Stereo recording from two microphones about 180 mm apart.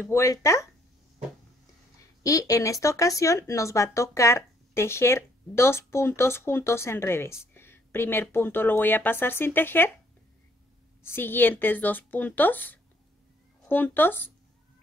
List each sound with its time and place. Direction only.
0.0 s speech: 15° left (ahead or behind)
2.2 s speech: 20° left (ahead or behind)
11.1 s speech: 10° left (ahead or behind)